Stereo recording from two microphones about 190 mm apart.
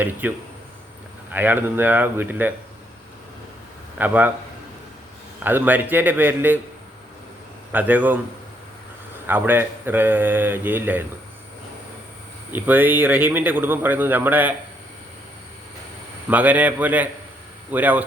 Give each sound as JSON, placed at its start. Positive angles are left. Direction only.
{"t": 0.0, "sound": "a man's voice", "side_deg": -10}
{"t": 3.9, "sound": "a man's voice", "side_deg": -10}
{"t": 5.4, "sound": "a man's voice", "side_deg": -10}
{"t": 7.7, "sound": "a man's voice", "side_deg": -10}
{"t": 9.2, "sound": "a man's voice", "side_deg": -10}
{"t": 12.5, "sound": "a man's voice", "side_deg": -10}
{"t": 16.3, "sound": "a man's voice", "side_deg": -10}